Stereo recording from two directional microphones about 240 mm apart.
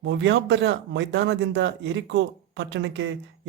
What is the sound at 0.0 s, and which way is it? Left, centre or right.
Speech, right.